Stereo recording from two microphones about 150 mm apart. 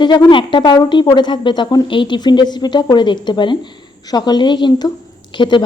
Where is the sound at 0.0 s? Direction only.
30° left (ahead or behind).